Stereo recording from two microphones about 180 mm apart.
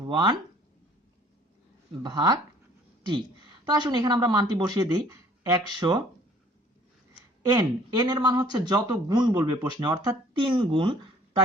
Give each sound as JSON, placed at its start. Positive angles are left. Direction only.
{"t": 0.0, "sound": "speech", "side_deg": -25}
{"t": 2.0, "sound": "speech", "side_deg": -25}
{"t": 3.7, "sound": "speech", "side_deg": -20}
{"t": 7.4, "sound": "speech", "side_deg": -20}
{"t": 9.6, "sound": "speech", "side_deg": -25}